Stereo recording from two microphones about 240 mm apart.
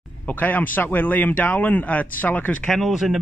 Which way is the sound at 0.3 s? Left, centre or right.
Centre.